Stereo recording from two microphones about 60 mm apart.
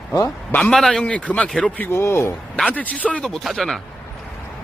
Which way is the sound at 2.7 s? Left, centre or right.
Left.